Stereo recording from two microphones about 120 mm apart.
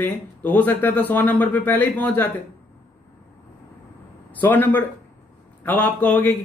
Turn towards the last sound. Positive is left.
turn(degrees=15)  # may be behind; listen again after turning